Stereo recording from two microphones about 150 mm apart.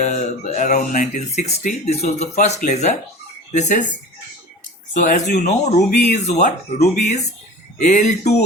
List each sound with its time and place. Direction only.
0.0 s speech: 50° left (ahead or behind)
1.3 s speech: 45° left (ahead or behind)
4.9 s speech: 55° left (ahead or behind)